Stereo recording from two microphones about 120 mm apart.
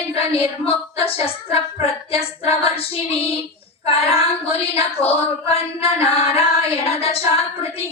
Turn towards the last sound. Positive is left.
turn(degrees=55)  # may be behind; listen again after turning